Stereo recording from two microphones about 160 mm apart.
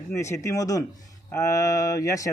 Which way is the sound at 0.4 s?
20° left (ahead or behind).